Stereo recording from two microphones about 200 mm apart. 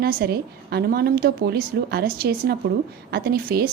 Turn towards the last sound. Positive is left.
turn(degrees=-50)  # may be behind; listen again after turning